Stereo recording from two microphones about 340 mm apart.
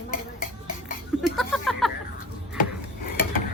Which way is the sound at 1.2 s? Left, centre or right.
Centre.